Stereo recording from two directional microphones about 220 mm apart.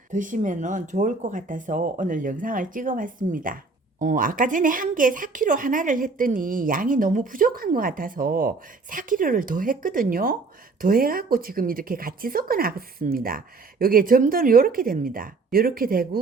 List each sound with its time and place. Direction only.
0.1 s a woman's voice: 35° right (ahead or behind)